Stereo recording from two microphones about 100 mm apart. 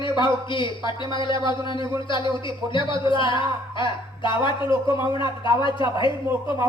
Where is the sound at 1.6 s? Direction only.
55° left (ahead or behind).